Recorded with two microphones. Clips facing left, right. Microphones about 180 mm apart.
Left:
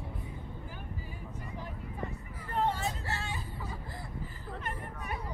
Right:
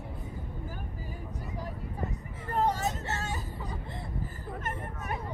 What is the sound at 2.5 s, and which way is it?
Vehicle, 40° right (ahead or behind).